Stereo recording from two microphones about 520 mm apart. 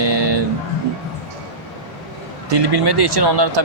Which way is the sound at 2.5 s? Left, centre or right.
Right.